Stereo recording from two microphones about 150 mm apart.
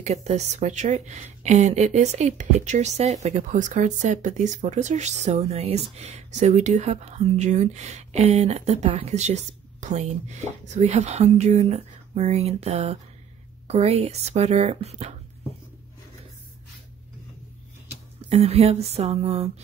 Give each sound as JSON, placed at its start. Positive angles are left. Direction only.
{"t": 0.0, "sound": "a woman's voice", "side_deg": -50}
{"t": 18.3, "sound": "a woman's voice", "side_deg": -45}